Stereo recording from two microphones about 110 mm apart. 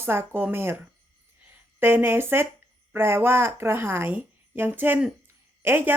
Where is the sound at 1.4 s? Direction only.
20° right (ahead or behind).